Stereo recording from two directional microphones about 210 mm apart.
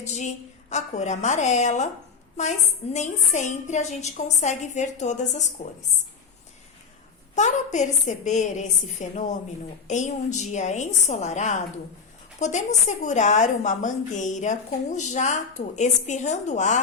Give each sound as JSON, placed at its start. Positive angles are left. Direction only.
{"t": 0.0, "sound": "a woman's voice", "side_deg": 35}
{"t": 2.9, "sound": "a woman's voice", "side_deg": 35}
{"t": 7.3, "sound": "a woman's voice", "side_deg": 35}